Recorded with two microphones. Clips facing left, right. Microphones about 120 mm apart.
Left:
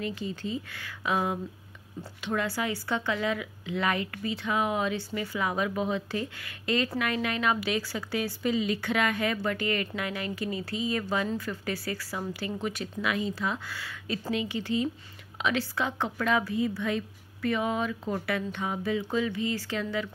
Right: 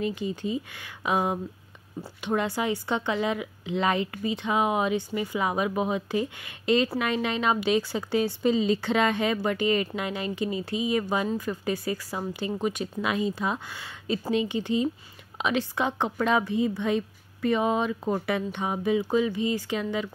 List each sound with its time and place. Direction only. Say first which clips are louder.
0.0 s speech: right 4 dB; 20° right (ahead or behind)